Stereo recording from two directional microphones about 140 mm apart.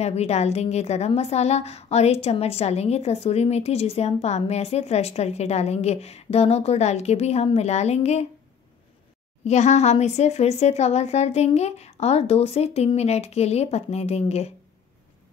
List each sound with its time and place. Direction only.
0.0 s a woman's voice: 50° left (ahead or behind)
9.4 s a woman's voice: 55° left (ahead or behind)